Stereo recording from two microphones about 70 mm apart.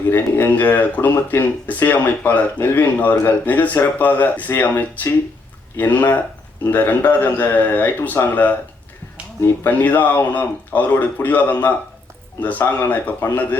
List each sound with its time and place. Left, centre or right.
0.1 s speech: left
9.6 s speech: left